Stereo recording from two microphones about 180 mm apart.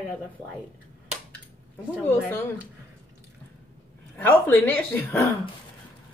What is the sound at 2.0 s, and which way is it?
Speech, 10° left (ahead or behind).